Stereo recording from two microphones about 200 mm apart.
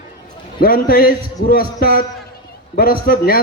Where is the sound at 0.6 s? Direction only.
45° left (ahead or behind).